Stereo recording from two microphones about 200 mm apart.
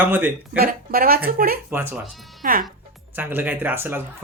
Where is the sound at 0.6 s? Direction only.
45° right (ahead or behind).